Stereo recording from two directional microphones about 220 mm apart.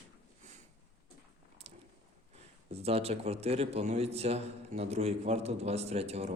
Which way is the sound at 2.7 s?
25° right (ahead or behind).